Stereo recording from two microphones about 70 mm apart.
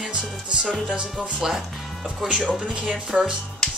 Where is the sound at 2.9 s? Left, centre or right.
Centre.